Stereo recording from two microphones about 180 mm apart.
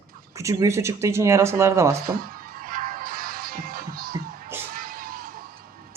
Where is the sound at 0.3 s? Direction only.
15° right (ahead or behind).